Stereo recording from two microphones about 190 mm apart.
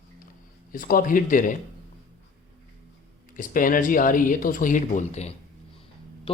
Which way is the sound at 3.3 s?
45° left (ahead or behind).